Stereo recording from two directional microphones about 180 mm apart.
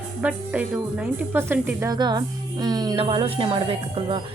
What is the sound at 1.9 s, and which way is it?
A woman's voice, 25° right (ahead or behind).